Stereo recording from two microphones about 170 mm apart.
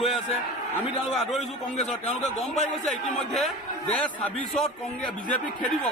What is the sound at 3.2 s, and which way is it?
Speech, centre (ahead or behind).